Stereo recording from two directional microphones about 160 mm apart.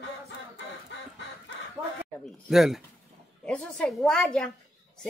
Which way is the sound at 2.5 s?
Centre (ahead or behind).